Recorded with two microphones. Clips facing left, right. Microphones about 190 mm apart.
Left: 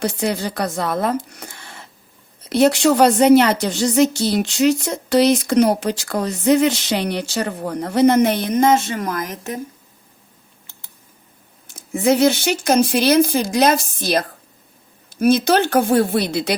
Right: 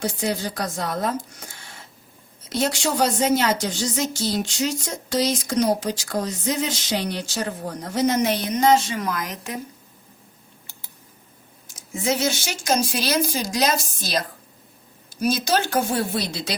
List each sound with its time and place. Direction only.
0.0 s a woman's voice: 65° left (ahead or behind); by 9.6 s 50° left (ahead or behind)
11.7 s a woman's voice: 60° left (ahead or behind)